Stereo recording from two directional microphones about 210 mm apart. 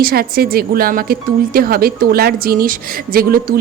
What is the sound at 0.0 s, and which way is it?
Speech, 45° right (ahead or behind).